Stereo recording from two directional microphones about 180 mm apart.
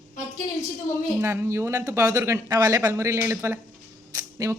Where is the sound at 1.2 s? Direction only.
15° right (ahead or behind).